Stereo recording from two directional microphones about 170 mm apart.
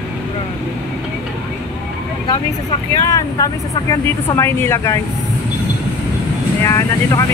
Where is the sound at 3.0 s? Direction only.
20° left (ahead or behind).